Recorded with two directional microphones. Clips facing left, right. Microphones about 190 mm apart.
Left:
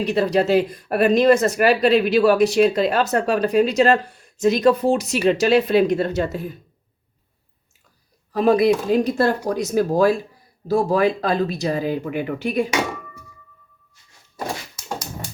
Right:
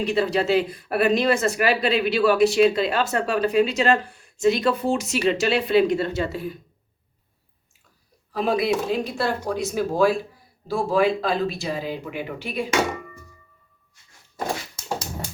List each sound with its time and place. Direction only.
0.0 s speech: 40° left (ahead or behind)
8.3 s speech: 45° left (ahead or behind)